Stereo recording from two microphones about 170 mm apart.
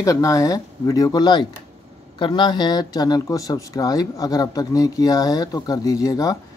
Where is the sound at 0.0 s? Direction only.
20° left (ahead or behind).